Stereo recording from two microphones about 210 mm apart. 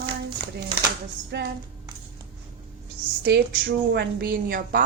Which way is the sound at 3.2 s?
50° right (ahead or behind).